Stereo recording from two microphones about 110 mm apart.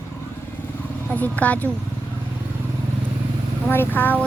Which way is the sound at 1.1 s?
15° left (ahead or behind).